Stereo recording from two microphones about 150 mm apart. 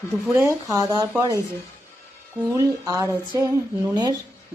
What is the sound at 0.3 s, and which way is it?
Speech, 20° right (ahead or behind).